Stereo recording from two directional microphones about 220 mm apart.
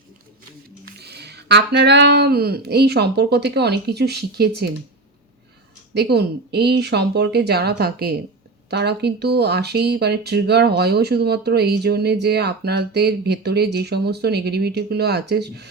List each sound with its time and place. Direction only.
0.9 s speech: 50° right (ahead or behind)
5.9 s speech: 50° right (ahead or behind)